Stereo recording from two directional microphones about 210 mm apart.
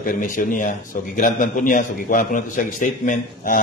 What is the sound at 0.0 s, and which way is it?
A man's voice, 40° left (ahead or behind).